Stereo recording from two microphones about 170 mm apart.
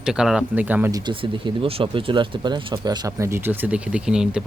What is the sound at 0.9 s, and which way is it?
Speech, 25° right (ahead or behind).